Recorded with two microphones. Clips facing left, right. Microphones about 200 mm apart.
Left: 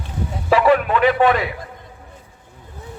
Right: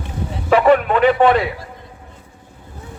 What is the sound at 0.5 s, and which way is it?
Speech, 40° right (ahead or behind).